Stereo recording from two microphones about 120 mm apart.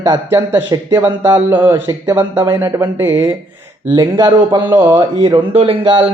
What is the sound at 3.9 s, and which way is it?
Speech, 30° right (ahead or behind).